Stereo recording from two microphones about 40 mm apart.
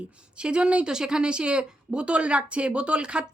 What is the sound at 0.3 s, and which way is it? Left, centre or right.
A woman's voice, right.